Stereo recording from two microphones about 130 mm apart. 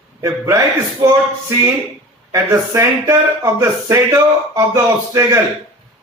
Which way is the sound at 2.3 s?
20° right (ahead or behind).